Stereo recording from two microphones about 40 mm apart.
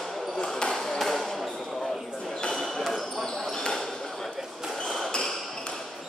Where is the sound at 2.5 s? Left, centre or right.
Centre.